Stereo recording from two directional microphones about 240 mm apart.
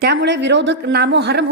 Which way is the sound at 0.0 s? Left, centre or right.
Right.